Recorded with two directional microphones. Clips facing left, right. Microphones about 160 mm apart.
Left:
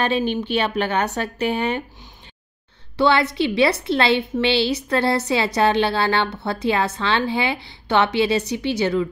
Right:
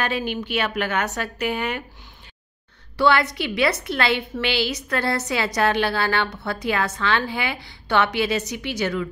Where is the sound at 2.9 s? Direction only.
25° left (ahead or behind).